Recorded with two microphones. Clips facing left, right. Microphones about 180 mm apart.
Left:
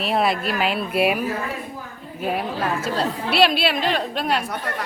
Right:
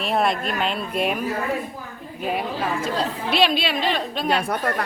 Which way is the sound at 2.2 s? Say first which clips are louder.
Left 1 dB; centre (ahead or behind).